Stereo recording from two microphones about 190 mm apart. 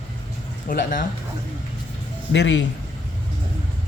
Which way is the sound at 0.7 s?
45° left (ahead or behind).